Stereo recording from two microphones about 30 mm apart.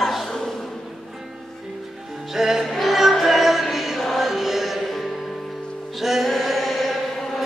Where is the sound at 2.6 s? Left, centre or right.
Centre.